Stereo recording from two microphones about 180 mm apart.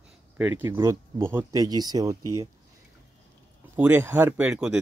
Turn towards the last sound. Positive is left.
turn(degrees=-10)  # may be behind; listen again after turning